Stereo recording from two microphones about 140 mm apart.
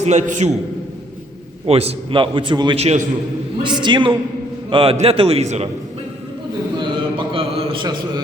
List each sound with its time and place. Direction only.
0.0 s a man's voice: 55° right (ahead or behind)
1.6 s a man's voice: 45° right (ahead or behind)
6.7 s a sound: 35° right (ahead or behind)